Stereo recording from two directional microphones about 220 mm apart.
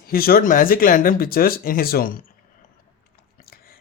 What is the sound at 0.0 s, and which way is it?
Speech, 40° left (ahead or behind).